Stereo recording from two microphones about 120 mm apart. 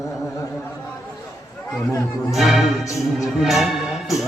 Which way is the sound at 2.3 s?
Centre (ahead or behind).